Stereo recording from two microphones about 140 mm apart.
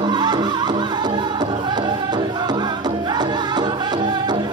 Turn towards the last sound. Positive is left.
turn(degrees=-30)  # may be behind; listen again after turning